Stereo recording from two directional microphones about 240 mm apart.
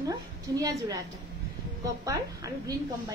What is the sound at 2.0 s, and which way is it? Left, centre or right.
Speech, centre.